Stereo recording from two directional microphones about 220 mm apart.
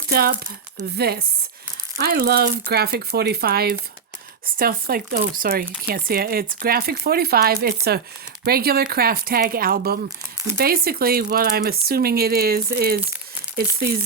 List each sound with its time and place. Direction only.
0.1 s speech: 45° right (ahead or behind)